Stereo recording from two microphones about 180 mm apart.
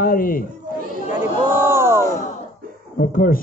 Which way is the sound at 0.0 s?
55° left (ahead or behind).